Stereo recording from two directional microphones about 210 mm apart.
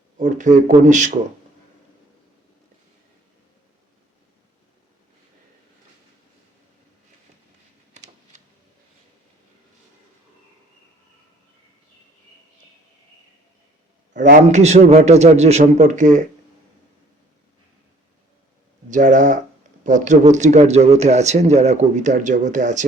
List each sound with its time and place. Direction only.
0.2 s a man's voice: 35° right (ahead or behind)
14.1 s a man's voice: 35° right (ahead or behind)
18.9 s a man's voice: 35° right (ahead or behind)